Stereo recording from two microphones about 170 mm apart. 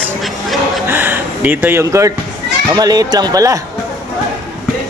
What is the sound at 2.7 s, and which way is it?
Speech, 20° right (ahead or behind).